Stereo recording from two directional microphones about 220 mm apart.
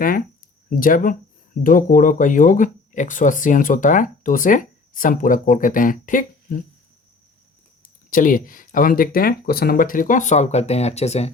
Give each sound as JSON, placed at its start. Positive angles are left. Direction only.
{"t": 0.8, "sound": "speech", "side_deg": 40}
{"t": 7.8, "sound": "speech", "side_deg": 40}